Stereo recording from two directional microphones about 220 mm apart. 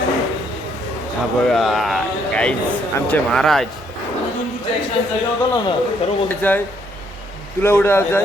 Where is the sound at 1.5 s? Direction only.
Centre (ahead or behind).